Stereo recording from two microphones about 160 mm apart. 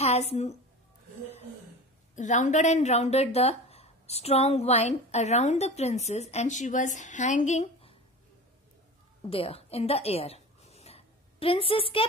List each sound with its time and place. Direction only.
0.0 s a woman's voice: 40° left (ahead or behind)
2.1 s a woman's voice: 50° left (ahead or behind)
9.2 s a sound: 35° left (ahead or behind)